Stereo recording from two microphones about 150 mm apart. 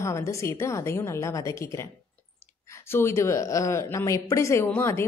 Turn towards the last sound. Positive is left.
turn(degrees=15)  # may be behind; listen again after turning